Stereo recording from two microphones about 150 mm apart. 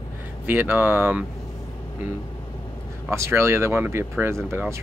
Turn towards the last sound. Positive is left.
turn(degrees=-15)  # may be behind; listen again after turning